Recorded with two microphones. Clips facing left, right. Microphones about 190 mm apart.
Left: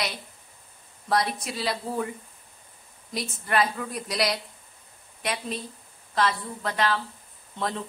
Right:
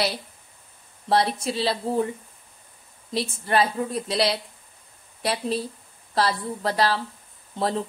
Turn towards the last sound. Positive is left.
turn(degrees=-35)  # may be behind; listen again after turning